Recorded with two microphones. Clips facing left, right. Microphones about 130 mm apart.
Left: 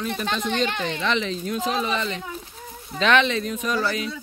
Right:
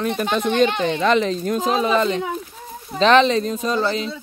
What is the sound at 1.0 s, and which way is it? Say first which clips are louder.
Speech: right 7 dB; 40° right (ahead or behind).